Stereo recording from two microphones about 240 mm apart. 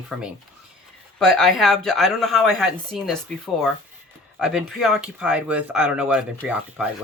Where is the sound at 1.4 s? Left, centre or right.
Centre.